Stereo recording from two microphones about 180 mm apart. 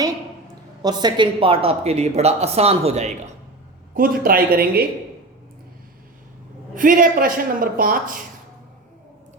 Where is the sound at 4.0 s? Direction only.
50° right (ahead or behind).